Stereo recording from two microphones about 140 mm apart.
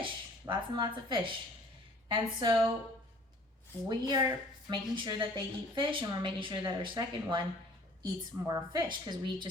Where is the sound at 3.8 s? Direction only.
30° right (ahead or behind).